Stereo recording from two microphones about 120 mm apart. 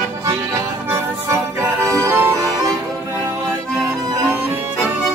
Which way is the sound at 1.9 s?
25° right (ahead or behind).